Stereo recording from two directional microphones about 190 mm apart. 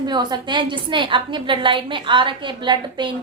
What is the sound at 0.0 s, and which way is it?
A woman's voice, 20° right (ahead or behind).